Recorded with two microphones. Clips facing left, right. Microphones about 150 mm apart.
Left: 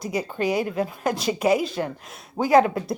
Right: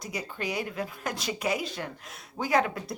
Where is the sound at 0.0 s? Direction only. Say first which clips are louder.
Left 9 dB; 30° left (ahead or behind).